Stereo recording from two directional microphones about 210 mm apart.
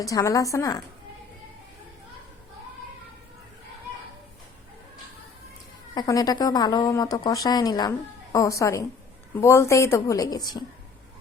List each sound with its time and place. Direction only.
0.0 s speech: 15° left (ahead or behind)
5.9 s speech: 15° left (ahead or behind)